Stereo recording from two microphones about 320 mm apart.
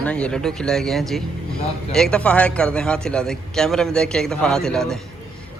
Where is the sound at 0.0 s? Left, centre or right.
Centre.